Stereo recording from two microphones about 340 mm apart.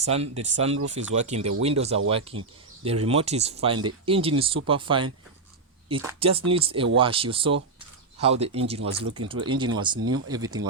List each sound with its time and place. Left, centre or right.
0.0 s speech: centre